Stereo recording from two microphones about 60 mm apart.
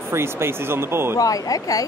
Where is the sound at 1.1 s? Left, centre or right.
Left.